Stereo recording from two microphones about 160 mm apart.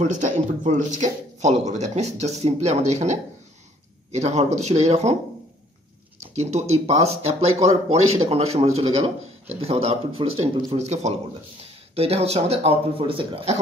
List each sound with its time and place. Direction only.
0.0 s speech: 50° right (ahead or behind)
6.3 s speech: 45° right (ahead or behind)